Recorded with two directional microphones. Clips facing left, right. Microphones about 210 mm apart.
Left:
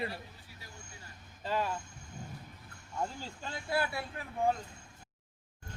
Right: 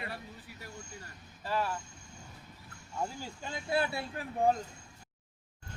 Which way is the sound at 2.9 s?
10° right (ahead or behind).